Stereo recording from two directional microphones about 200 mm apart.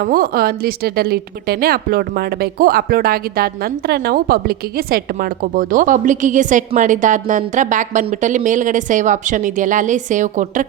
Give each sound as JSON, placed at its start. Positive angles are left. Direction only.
{"t": 0.0, "sound": "a woman's voice", "side_deg": -45}